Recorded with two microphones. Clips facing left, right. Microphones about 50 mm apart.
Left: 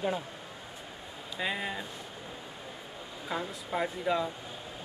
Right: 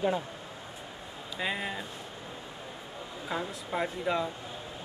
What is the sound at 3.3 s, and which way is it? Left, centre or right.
A man's voice, centre.